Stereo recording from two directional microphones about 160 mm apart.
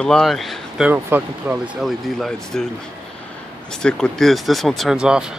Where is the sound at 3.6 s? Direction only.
5° left (ahead or behind).